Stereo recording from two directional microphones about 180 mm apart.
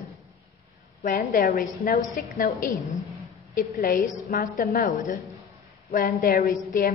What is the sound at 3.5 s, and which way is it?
A woman's voice, 55° left (ahead or behind).